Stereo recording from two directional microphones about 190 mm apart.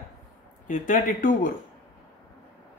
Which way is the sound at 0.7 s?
45° left (ahead or behind).